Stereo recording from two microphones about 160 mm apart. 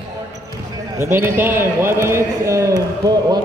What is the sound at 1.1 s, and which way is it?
A man's voice, 15° right (ahead or behind).